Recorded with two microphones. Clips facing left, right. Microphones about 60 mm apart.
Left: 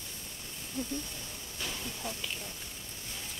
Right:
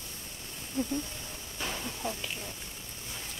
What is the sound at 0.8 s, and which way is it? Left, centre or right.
Speech, right.